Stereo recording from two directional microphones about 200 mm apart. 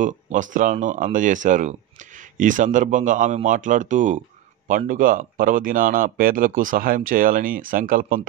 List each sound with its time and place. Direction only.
0.0 s speech: 40° right (ahead or behind)